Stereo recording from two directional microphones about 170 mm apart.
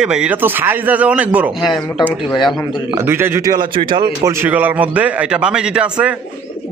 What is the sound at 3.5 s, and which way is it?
Speech, 30° right (ahead or behind).